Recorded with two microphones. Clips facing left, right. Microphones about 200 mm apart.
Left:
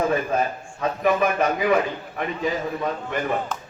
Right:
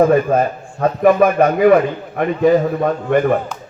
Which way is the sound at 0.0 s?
55° right (ahead or behind).